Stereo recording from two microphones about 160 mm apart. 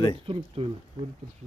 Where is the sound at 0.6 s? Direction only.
35° right (ahead or behind).